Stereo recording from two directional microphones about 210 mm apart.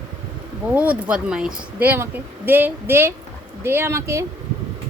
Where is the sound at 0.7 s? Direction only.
5° right (ahead or behind).